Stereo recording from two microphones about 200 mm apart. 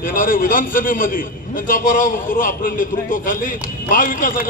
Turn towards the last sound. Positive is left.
turn(degrees=45)  # may be behind; listen again after turning